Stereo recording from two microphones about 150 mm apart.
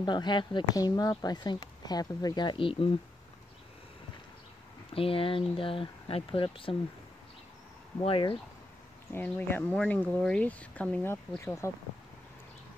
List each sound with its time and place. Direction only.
0.0 s speech: 30° left (ahead or behind)
4.9 s speech: 40° left (ahead or behind)
8.0 s speech: 35° left (ahead or behind)
9.1 s speech: 15° left (ahead or behind)